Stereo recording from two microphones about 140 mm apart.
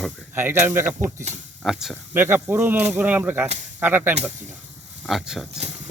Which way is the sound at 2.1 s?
15° right (ahead or behind).